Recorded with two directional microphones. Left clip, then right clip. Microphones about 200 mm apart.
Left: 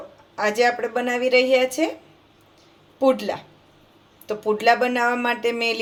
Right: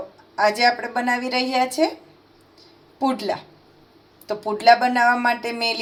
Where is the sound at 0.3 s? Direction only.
15° left (ahead or behind).